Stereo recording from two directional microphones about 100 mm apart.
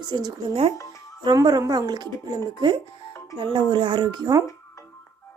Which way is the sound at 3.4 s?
50° right (ahead or behind).